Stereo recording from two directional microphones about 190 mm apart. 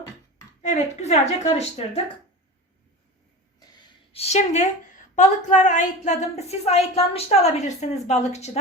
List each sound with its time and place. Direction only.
0.6 s a woman's voice: 40° left (ahead or behind)
4.1 s a woman's voice: 35° left (ahead or behind)